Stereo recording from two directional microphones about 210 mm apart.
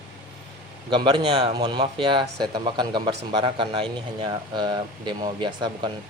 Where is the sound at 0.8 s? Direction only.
20° right (ahead or behind).